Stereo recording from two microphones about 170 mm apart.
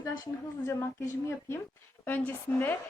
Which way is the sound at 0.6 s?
15° left (ahead or behind).